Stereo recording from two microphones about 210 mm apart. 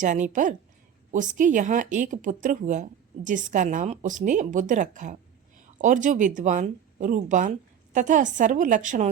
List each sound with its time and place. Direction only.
0.0 s speech: 35° right (ahead or behind)